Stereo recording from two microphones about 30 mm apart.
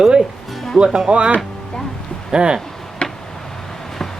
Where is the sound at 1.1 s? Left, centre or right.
Right.